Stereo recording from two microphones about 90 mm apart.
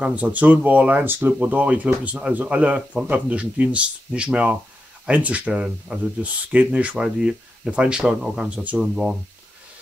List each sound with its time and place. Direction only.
0.0 s speech: 15° right (ahead or behind)